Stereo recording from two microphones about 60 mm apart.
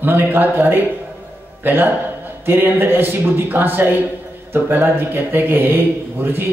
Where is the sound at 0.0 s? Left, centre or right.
Right.